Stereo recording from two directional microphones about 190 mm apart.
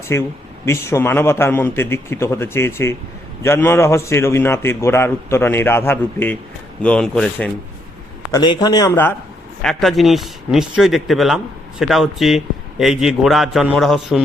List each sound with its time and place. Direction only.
0.1 s a man's voice: 15° left (ahead or behind)
8.3 s a man's voice: 20° left (ahead or behind)
9.6 s speech: centre (ahead or behind)